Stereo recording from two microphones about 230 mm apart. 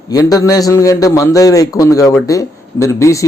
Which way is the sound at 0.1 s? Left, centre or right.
Centre.